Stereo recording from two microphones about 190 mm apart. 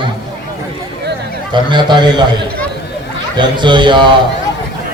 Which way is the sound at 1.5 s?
25° right (ahead or behind).